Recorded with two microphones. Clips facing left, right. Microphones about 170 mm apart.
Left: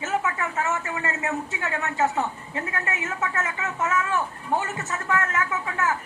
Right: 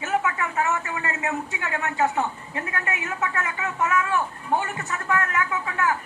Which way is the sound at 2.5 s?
25° left (ahead or behind).